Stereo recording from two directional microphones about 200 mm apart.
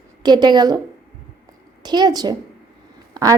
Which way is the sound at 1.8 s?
20° right (ahead or behind).